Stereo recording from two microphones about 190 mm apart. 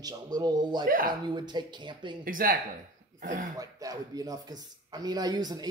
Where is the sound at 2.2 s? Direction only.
50° right (ahead or behind).